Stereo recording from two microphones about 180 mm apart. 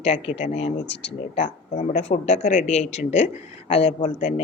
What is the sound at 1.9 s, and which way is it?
Speech, 35° left (ahead or behind).